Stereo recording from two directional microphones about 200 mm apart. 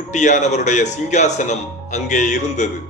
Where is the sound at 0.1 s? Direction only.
35° left (ahead or behind).